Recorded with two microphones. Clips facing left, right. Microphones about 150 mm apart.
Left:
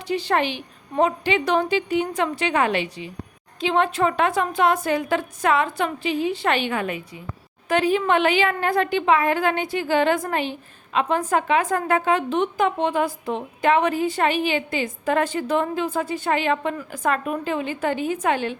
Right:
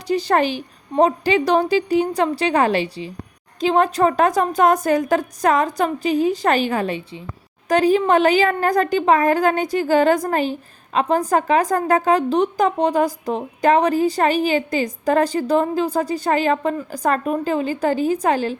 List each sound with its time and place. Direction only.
0.1 s a woman's voice: 40° right (ahead or behind)